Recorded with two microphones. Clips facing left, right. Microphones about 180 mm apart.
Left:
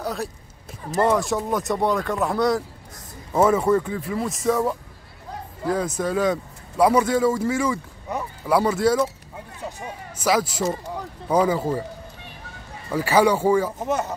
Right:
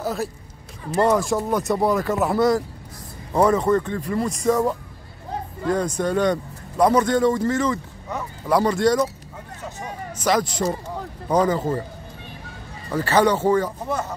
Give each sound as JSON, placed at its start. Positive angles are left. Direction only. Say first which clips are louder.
{"t": 0.0, "sound": "speech", "louder": "right 2 dB", "side_deg": 0}
{"t": 12.9, "sound": "speech", "louder": "even", "side_deg": 10}
{"t": 13.7, "sound": "speech", "louder": "left 2 dB", "side_deg": 20}